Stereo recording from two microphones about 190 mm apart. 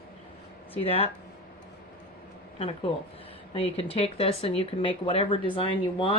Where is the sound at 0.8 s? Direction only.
30° left (ahead or behind).